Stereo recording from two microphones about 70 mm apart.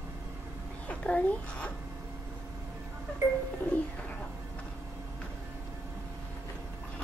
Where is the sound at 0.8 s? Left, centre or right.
Centre.